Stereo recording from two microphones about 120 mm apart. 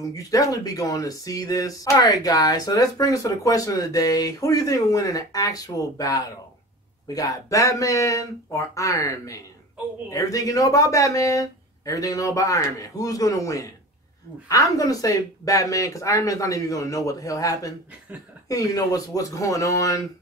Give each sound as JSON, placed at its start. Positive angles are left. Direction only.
{"t": 0.1, "sound": "speech", "side_deg": 30}